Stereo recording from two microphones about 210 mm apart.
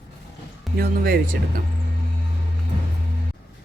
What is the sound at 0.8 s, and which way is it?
Speech, 45° right (ahead or behind).